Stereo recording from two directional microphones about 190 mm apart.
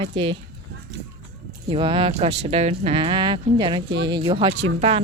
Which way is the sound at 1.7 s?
25° right (ahead or behind).